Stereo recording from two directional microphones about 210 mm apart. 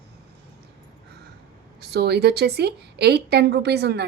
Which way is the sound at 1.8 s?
50° right (ahead or behind).